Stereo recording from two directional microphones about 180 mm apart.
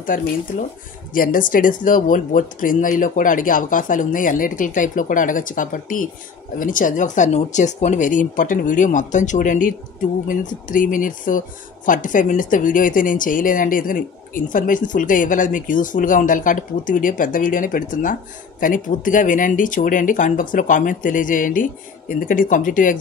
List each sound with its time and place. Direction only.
0.0 s speech: 50° left (ahead or behind)